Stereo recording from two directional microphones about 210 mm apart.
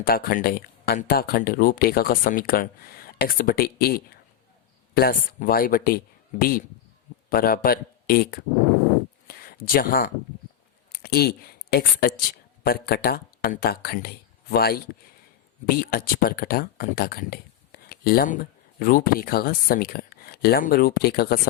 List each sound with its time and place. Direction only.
0.0 s speech: 45° left (ahead or behind)
7.3 s a man's voice: 45° left (ahead or behind)
9.2 s a sound: 45° left (ahead or behind)
10.9 s speech: 45° left (ahead or behind)